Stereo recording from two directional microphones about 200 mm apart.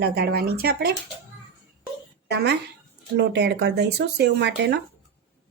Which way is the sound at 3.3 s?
60° right (ahead or behind).